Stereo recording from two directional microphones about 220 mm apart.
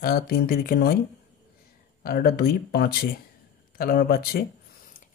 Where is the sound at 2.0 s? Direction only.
45° left (ahead or behind).